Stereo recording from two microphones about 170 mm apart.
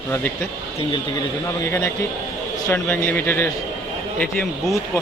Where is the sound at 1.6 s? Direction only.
15° left (ahead or behind).